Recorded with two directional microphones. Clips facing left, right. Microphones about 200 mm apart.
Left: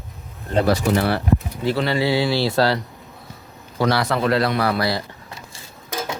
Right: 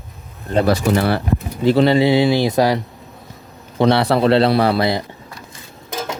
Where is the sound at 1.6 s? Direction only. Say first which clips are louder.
Right 11 dB; 20° right (ahead or behind).